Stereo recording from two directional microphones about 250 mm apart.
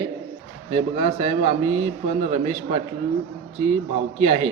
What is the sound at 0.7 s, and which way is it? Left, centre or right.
Speech, right.